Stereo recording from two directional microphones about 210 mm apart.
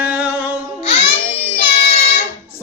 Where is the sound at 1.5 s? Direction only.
35° left (ahead or behind).